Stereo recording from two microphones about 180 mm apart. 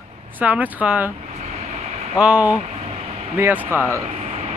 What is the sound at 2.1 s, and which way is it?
Speech, 5° right (ahead or behind).